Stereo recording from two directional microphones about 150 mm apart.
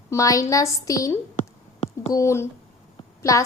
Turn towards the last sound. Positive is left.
turn(degrees=20)  # may be behind; listen again after turning